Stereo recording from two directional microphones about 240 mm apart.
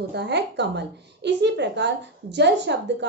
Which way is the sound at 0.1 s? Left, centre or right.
Right.